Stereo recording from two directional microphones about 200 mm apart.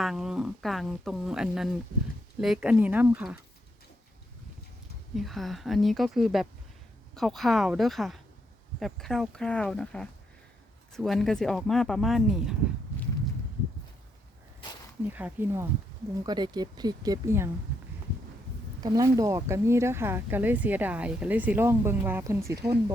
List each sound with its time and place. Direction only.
0.0 s speech: centre (ahead or behind)
5.1 s speech: centre (ahead or behind)
15.1 s speech: 10° right (ahead or behind)
16.2 s speech: 20° right (ahead or behind)
18.8 s speech: 20° right (ahead or behind)